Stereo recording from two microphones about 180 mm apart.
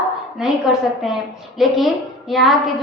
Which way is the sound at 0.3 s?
Centre (ahead or behind).